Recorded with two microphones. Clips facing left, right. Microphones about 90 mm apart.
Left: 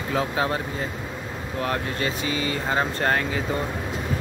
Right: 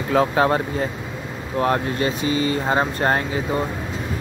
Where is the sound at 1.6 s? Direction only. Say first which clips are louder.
Right 7 dB; 30° right (ahead or behind).